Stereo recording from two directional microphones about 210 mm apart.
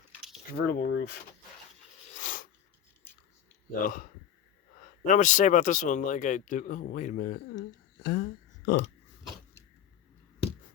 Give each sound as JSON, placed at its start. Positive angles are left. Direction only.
{"t": 0.5, "sound": "speech", "side_deg": 45}
{"t": 2.1, "sound": "a sound", "side_deg": 40}
{"t": 3.8, "sound": "speech", "side_deg": 40}